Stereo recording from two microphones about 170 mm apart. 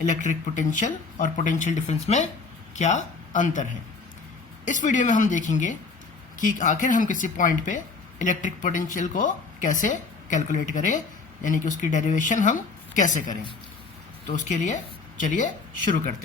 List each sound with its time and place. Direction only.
0.0 s a woman's voice: 45° left (ahead or behind)
14.3 s a woman's voice: 45° left (ahead or behind)